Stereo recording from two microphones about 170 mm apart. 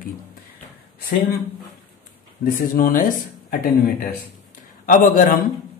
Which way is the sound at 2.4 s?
55° left (ahead or behind).